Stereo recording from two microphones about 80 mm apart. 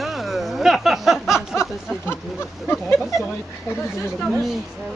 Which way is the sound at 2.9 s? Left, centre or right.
Centre.